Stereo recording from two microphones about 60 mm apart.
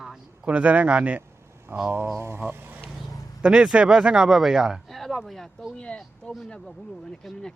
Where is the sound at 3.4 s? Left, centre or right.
Centre.